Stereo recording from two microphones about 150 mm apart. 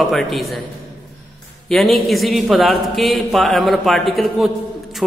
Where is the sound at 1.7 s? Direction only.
Centre (ahead or behind).